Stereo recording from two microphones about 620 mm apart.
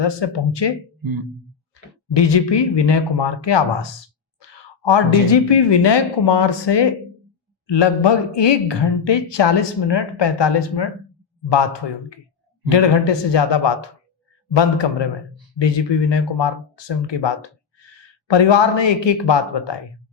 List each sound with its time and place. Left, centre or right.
0.0 s speech: left
2.1 s a woman's voice: left
12.6 s speech: left